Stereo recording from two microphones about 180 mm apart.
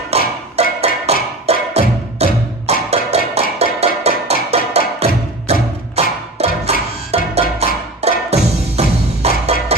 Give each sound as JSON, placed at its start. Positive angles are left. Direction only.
{"t": 0.1, "sound": "music", "side_deg": -35}